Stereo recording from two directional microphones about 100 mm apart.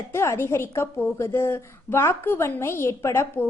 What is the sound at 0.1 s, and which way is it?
A woman's voice, 25° left (ahead or behind).